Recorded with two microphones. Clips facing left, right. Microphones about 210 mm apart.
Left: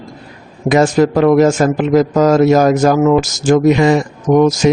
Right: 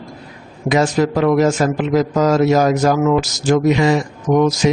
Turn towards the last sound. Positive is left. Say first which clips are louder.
# left 4 dB
turn(degrees=50)  # may be behind; listen again after turning